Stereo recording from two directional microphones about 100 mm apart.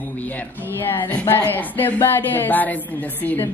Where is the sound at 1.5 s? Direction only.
20° left (ahead or behind).